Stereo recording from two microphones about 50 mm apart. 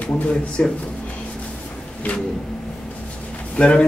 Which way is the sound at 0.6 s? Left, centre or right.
Left.